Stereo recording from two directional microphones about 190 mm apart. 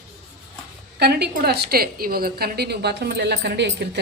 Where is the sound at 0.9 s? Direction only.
60° right (ahead or behind).